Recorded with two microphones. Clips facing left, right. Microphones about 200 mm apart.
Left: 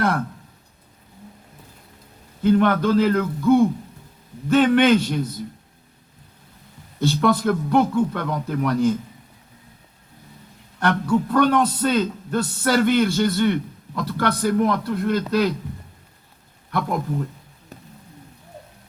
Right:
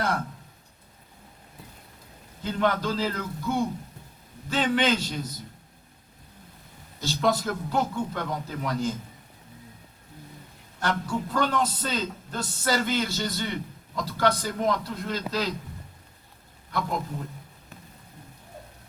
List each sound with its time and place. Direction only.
2.4 s a man's voice: 55° left (ahead or behind)
7.0 s a man's voice: 60° left (ahead or behind)
10.8 s a man's voice: 60° left (ahead or behind)
16.7 s a man's voice: 55° left (ahead or behind)